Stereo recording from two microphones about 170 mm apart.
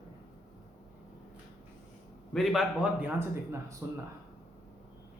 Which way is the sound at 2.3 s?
Centre (ahead or behind).